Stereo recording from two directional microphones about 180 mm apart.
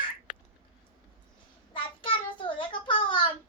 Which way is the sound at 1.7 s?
25° left (ahead or behind).